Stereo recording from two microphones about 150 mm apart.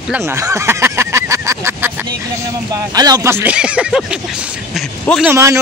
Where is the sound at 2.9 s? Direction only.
25° right (ahead or behind); by 5.3 s centre (ahead or behind).